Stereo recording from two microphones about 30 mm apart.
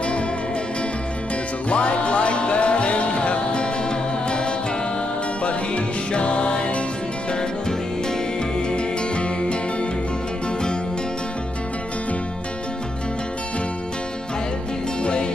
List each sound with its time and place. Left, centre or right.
1.7 s music: left
5.4 s music: left
8.6 s music: left